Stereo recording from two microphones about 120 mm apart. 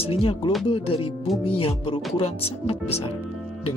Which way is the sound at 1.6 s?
50° left (ahead or behind).